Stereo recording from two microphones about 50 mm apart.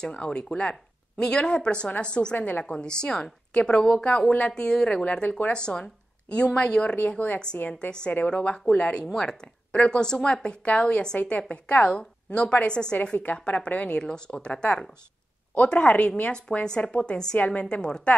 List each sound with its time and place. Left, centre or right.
0.0 s speech: centre
2.3 s a woman's voice: left
2.6 s a woman's voice: centre
12.9 s speech: left
13.9 s speech: centre